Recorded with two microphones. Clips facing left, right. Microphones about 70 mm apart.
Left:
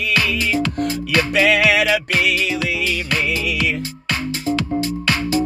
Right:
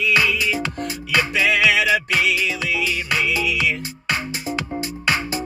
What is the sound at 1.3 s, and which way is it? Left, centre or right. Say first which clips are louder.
Music: left 3 dB; left.